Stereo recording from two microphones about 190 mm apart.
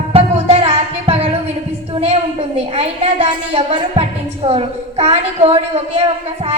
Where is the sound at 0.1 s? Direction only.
30° right (ahead or behind).